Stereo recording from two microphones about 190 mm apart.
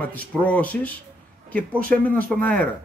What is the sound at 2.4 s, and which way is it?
Speech, 10° left (ahead or behind).